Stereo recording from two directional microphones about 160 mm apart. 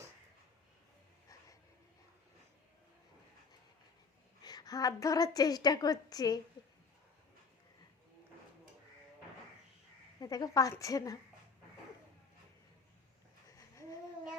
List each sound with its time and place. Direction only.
4.4 s a woman's voice: 25° left (ahead or behind)
10.2 s a woman's voice: 25° left (ahead or behind)
13.6 s babbling: 20° left (ahead or behind)